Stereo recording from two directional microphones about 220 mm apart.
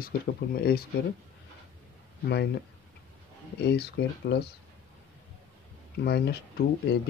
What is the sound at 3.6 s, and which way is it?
Speech, 50° left (ahead or behind).